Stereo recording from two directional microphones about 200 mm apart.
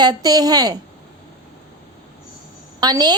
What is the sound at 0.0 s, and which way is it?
Speech, 20° right (ahead or behind).